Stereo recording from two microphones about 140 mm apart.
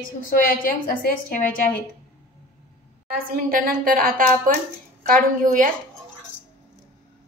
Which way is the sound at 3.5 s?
85° right.